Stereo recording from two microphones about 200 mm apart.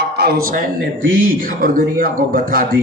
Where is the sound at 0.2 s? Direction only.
50° right (ahead or behind).